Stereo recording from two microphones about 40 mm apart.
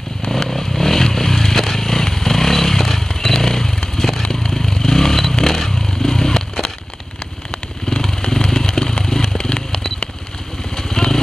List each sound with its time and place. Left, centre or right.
0.3 s motorcycle: centre
7.9 s vehicle: centre
8.2 s motorcycle: left
9.4 s a sound: left
10.8 s vehicle: centre